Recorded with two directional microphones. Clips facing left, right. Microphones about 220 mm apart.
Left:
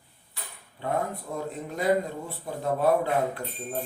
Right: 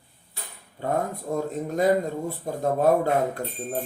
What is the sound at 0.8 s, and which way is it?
Speech, 45° right (ahead or behind).